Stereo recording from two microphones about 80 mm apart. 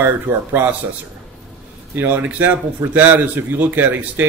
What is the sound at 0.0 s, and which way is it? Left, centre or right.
Speech, right.